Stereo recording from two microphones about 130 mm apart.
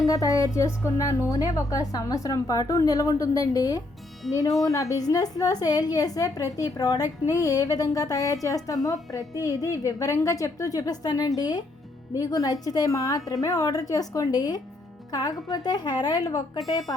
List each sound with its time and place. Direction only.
0.0 s a woman's voice: 25° left (ahead or behind)